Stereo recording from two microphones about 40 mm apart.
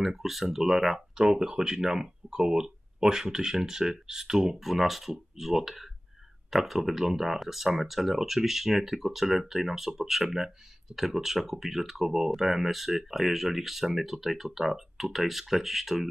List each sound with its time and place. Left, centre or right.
0.0 s speech: centre